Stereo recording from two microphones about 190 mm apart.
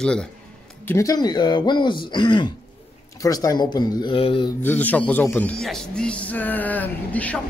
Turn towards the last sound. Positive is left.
turn(degrees=10)  # may be behind; listen again after turning